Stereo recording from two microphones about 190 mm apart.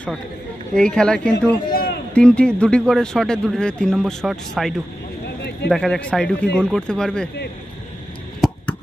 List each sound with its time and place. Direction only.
0.7 s speech: 5° left (ahead or behind)
1.7 s run: 50° left (ahead or behind)
2.1 s speech: 5° left (ahead or behind)
5.2 s a sound: 60° left (ahead or behind)
5.7 s speech: centre (ahead or behind)
8.4 s a sound: centre (ahead or behind)